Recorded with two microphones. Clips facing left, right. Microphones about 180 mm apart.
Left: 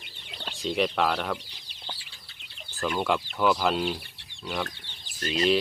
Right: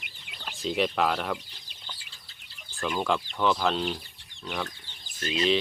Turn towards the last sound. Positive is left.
turn(degrees=45)  # may be behind; listen again after turning